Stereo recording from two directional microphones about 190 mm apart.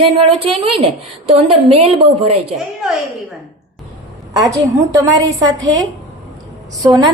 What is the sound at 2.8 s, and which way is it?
Speech, 5° right (ahead or behind).